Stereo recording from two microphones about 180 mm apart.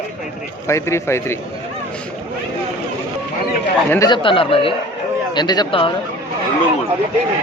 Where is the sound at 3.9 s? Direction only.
20° left (ahead or behind).